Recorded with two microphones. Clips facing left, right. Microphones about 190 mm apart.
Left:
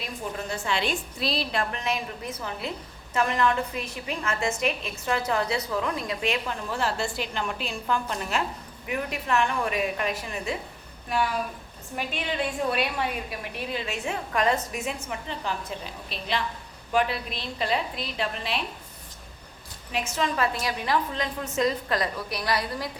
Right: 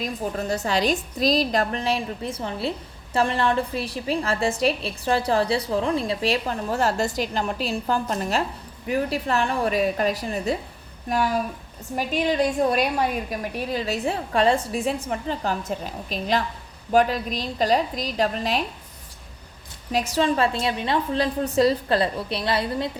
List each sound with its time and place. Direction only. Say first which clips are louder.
0.0 s a woman's voice: right 6 dB; 40° right (ahead or behind)
11.9 s a woman's voice: right 8 dB; 40° right (ahead or behind)
19.9 s a woman's voice: right 6 dB; 35° right (ahead or behind)